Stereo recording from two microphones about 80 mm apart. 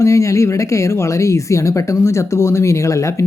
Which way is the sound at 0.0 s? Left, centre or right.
Left.